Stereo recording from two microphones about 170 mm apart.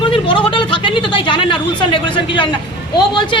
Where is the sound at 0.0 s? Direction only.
30° left (ahead or behind).